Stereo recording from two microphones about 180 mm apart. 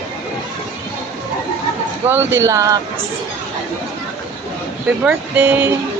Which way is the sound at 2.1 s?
10° right (ahead or behind).